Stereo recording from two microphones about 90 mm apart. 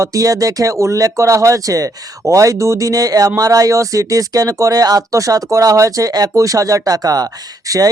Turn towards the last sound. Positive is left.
turn(degrees=-40)  # may be behind; listen again after turning